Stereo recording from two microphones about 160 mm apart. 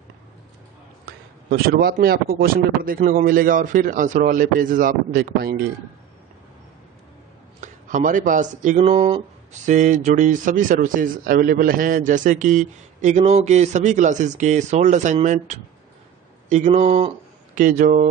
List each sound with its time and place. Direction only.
1.0 s a man's voice: 70° right (ahead or behind)
7.6 s speech: 50° right (ahead or behind); by 9.6 s 35° right (ahead or behind)
9.7 s speech: 50° right (ahead or behind)
17.6 s a man's voice: 55° right (ahead or behind)